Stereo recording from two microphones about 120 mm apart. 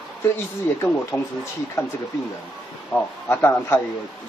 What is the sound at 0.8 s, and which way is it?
Speech, 15° left (ahead or behind).